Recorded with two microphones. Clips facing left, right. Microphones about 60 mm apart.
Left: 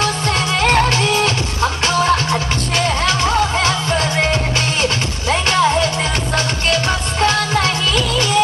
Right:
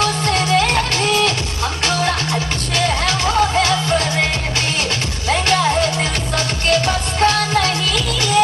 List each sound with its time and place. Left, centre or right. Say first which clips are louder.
0.0 s music: even; left
5.3 s music: left 1 dB; left